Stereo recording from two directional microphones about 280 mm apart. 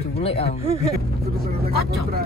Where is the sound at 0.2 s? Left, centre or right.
Left.